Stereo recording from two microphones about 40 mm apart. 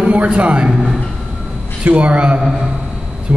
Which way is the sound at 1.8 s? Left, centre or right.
Right.